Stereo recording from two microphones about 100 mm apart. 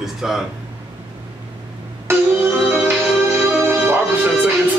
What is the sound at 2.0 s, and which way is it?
Music, 25° right (ahead or behind).